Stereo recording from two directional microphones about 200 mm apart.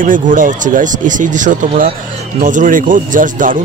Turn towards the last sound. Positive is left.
turn(degrees=-40)  # may be behind; listen again after turning